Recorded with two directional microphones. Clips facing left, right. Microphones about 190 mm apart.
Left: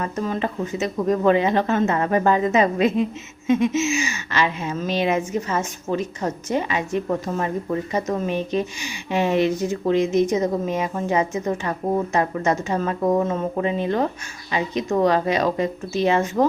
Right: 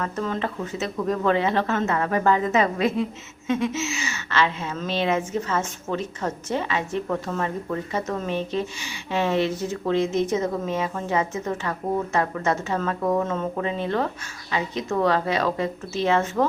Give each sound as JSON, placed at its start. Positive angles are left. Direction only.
{"t": 0.0, "sound": "speech", "side_deg": 15}